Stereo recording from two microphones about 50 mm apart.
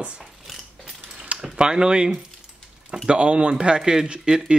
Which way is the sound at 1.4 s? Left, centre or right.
Centre.